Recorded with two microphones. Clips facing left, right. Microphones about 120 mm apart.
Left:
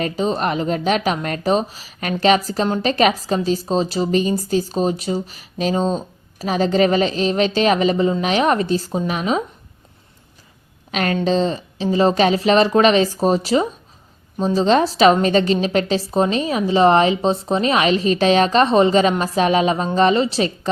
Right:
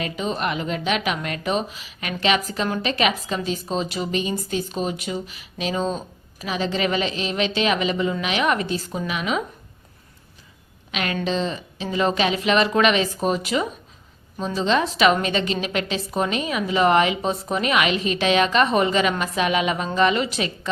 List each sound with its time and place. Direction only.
0.0 s a woman's voice: 35° left (ahead or behind)
10.9 s a woman's voice: 40° left (ahead or behind)